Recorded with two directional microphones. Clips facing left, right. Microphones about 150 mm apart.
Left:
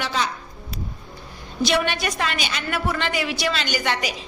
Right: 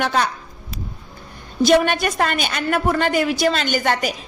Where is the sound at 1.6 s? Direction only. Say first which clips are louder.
Right 7 dB; 50° right (ahead or behind).